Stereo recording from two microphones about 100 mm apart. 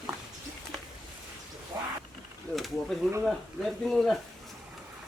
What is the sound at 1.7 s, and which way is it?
Wild animals, 40° right (ahead or behind).